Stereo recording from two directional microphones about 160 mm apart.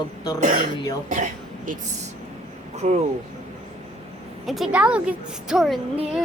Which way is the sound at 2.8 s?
45° right (ahead or behind).